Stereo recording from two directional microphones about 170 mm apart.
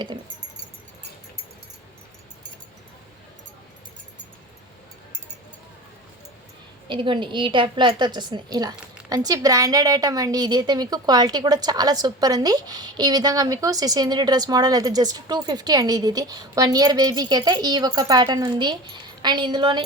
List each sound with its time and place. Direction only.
6.8 s a woman's voice: 30° right (ahead or behind)